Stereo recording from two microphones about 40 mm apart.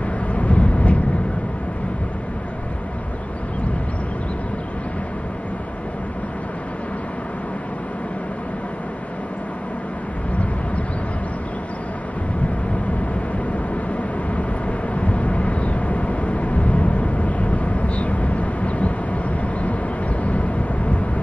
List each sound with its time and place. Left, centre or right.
0.3 s vehicle: left
15.0 s vehicle: left
20.2 s vehicle: left